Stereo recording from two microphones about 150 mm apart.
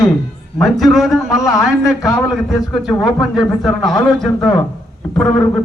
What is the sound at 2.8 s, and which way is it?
Speech, centre (ahead or behind).